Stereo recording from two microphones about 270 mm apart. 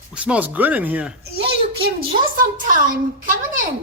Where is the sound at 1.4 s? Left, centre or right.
Right.